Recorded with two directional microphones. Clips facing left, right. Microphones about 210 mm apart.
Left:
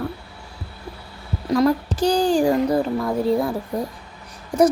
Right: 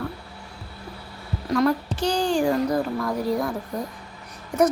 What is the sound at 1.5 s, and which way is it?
Speech, 35° left (ahead or behind).